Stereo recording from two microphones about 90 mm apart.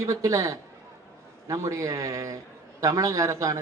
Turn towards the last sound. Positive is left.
turn(degrees=-35)  # may be behind; listen again after turning